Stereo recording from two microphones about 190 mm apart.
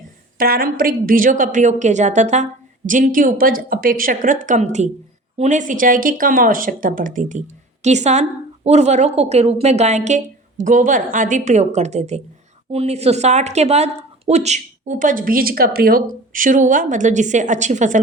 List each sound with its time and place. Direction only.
0.3 s a woman's voice: 50° right (ahead or behind)